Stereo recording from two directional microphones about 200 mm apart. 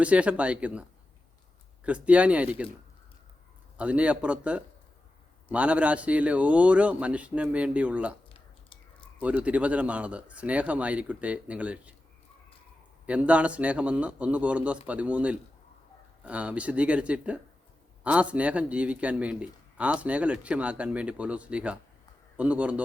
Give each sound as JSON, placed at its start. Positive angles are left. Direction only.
{"t": 0.0, "sound": "a man's voice", "side_deg": -5}
{"t": 3.8, "sound": "a man's voice", "side_deg": -5}
{"t": 8.3, "sound": "a sound", "side_deg": 25}
{"t": 9.2, "sound": "a man's voice", "side_deg": -5}
{"t": 13.1, "sound": "a man's voice", "side_deg": -5}